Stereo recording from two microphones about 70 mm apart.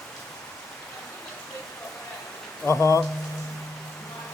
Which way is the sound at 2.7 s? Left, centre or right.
Left.